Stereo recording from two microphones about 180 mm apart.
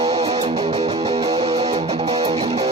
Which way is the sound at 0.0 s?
35° right (ahead or behind).